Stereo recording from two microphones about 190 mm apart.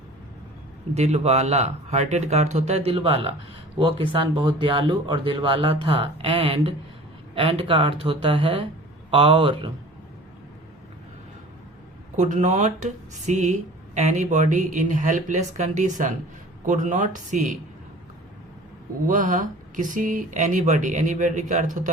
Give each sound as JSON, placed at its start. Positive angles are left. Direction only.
{"t": 0.9, "sound": "speech", "side_deg": -35}
{"t": 12.1, "sound": "speech", "side_deg": -40}
{"t": 19.0, "sound": "speech", "side_deg": -45}